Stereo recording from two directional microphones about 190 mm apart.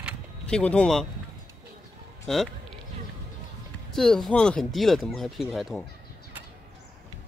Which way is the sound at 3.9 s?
Centre (ahead or behind).